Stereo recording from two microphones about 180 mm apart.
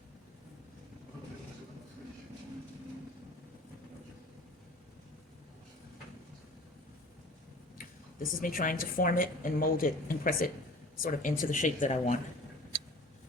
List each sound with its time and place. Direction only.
8.2 s speech: 50° left (ahead or behind)